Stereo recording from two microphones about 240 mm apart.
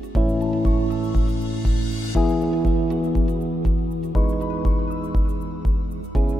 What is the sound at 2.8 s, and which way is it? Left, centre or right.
Music, centre.